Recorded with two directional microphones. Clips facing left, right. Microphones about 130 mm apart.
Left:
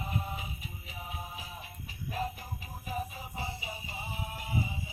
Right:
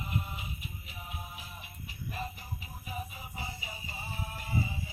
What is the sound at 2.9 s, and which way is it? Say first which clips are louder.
Music: left 4 dB; 35° left (ahead or behind).